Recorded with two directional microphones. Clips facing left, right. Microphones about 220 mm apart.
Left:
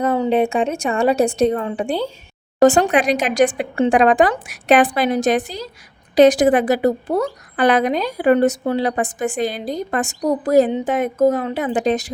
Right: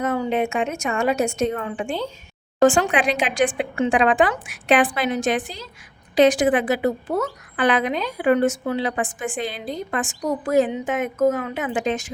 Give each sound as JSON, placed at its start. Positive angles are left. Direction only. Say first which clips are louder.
{"t": 0.0, "sound": "a woman's voice", "louder": "left 5 dB", "side_deg": 30}